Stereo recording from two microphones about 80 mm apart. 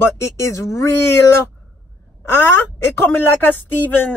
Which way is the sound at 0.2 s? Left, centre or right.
Left.